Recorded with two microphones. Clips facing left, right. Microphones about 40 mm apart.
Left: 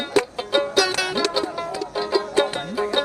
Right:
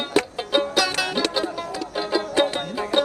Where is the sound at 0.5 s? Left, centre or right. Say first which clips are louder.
Left 1 dB; centre.